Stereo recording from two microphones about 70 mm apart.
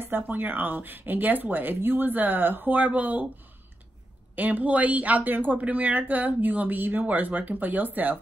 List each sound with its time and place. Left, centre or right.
0.0 s speech: right
4.4 s speech: right